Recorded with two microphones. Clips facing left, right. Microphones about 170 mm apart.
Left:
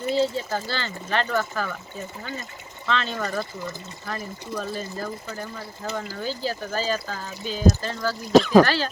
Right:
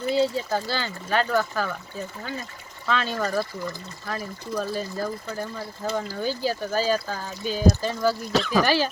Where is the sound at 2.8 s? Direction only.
5° right (ahead or behind).